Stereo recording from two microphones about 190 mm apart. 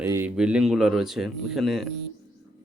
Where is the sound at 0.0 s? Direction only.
10° right (ahead or behind).